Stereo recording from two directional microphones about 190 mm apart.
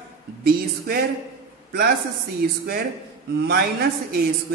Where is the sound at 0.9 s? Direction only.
55° right (ahead or behind).